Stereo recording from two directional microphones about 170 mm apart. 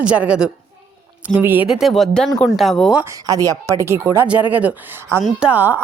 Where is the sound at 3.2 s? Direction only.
20° right (ahead or behind).